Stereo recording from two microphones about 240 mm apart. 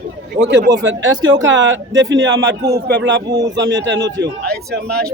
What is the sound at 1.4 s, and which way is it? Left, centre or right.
A man's voice, right.